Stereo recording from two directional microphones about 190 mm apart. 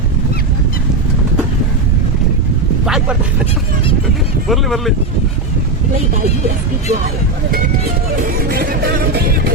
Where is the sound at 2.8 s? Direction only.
5° right (ahead or behind).